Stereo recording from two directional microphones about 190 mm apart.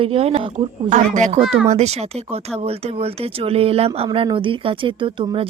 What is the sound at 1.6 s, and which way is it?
Speech, 35° right (ahead or behind).